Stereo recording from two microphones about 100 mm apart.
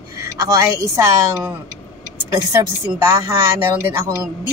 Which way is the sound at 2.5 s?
30° right (ahead or behind).